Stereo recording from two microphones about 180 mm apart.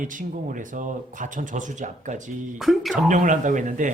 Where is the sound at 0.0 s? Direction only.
45° right (ahead or behind).